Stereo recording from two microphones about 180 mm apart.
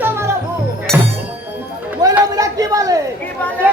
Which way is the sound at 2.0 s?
20° right (ahead or behind).